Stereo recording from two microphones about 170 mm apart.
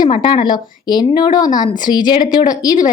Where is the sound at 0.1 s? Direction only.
30° left (ahead or behind).